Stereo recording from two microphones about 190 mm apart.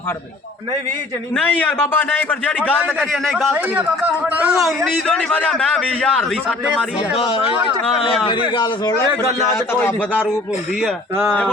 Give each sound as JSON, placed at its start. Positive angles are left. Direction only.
{"t": 1.4, "sound": "a man's voice", "side_deg": 10}
{"t": 7.2, "sound": "a man's voice", "side_deg": 30}
{"t": 9.5, "sound": "a man's voice", "side_deg": 10}